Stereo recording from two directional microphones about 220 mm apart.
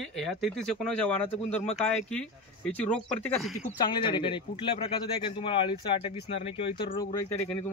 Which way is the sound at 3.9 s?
20° left (ahead or behind).